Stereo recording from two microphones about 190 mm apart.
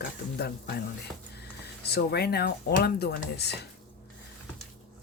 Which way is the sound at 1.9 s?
55° left (ahead or behind).